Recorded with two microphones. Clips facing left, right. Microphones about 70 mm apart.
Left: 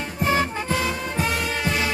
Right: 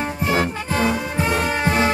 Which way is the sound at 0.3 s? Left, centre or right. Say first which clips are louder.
Even; right.